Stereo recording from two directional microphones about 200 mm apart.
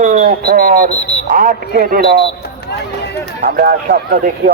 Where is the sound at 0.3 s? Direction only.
50° right (ahead or behind).